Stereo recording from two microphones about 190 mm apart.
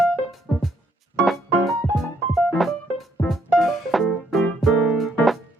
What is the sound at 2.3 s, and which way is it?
Music, centre (ahead or behind).